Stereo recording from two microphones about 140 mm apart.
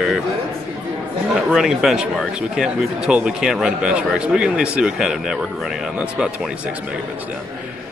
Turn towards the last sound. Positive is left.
turn(degrees=-5)  # may be behind; listen again after turning